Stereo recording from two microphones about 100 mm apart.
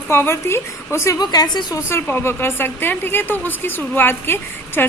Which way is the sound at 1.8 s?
25° left (ahead or behind).